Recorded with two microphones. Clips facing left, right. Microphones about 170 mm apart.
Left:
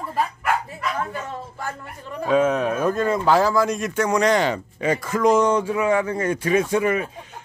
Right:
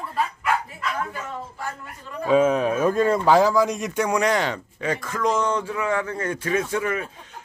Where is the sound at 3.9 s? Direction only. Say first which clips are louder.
Left 5 dB; 10° right (ahead or behind).